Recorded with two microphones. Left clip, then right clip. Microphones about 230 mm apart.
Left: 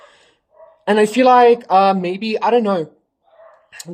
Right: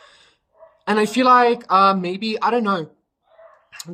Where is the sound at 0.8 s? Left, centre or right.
Centre.